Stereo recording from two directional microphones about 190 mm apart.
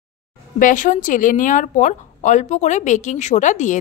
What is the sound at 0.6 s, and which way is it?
Speech, 45° left (ahead or behind).